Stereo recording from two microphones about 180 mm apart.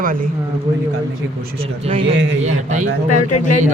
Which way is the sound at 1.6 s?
35° right (ahead or behind).